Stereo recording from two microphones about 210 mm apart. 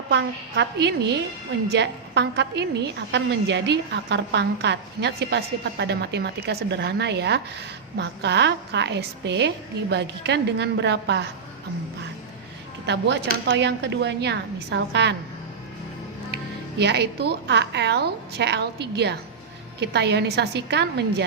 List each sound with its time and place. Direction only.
0.1 s a woman's voice: 55° right (ahead or behind)
12.8 s a woman's voice: 55° right (ahead or behind)
16.3 s a woman's voice: 50° right (ahead or behind)